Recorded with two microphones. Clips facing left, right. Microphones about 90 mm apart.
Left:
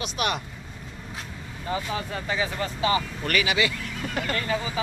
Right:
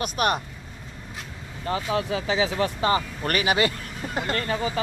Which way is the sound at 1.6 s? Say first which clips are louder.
Right 4 dB; 70° right (ahead or behind).